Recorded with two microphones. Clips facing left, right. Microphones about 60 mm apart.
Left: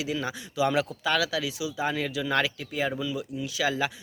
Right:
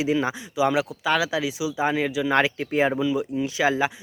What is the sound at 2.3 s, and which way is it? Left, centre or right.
Speech, right.